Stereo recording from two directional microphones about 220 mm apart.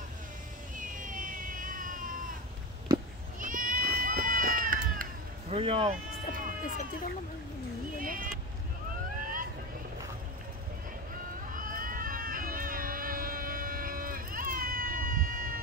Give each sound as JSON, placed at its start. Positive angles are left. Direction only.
{"t": 0.7, "sound": "cat", "side_deg": -35}
{"t": 3.3, "sound": "run", "side_deg": -35}
{"t": 5.5, "sound": "speech", "side_deg": -25}
{"t": 6.3, "sound": "run", "side_deg": -40}
{"t": 8.0, "sound": "a sound", "side_deg": -40}
{"t": 11.5, "sound": "crowd", "side_deg": -40}